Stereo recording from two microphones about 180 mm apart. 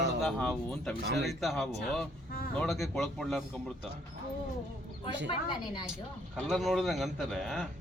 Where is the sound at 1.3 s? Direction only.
Centre (ahead or behind).